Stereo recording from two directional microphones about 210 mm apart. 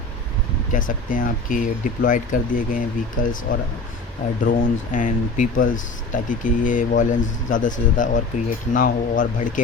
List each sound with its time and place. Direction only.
0.7 s speech: 40° left (ahead or behind)